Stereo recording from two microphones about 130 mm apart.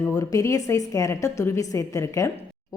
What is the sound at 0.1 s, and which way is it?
A woman's voice, 25° left (ahead or behind).